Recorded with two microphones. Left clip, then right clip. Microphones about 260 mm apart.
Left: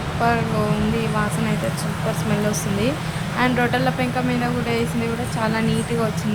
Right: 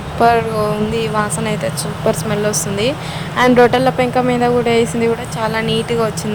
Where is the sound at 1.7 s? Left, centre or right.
Right.